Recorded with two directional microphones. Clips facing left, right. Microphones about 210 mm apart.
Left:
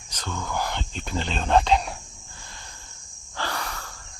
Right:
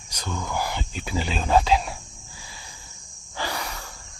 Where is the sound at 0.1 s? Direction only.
10° right (ahead or behind).